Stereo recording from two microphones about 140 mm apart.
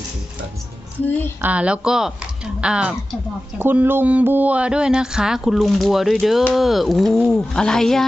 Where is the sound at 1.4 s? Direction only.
10° right (ahead or behind).